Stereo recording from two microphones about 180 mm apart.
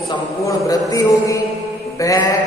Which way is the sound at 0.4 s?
20° left (ahead or behind).